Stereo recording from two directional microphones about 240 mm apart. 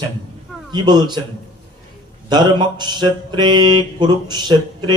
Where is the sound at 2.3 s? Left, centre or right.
Centre.